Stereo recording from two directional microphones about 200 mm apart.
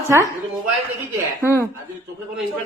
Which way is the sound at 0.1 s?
15° right (ahead or behind).